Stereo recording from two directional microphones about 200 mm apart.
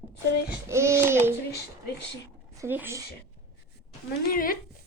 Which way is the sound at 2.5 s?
10° right (ahead or behind).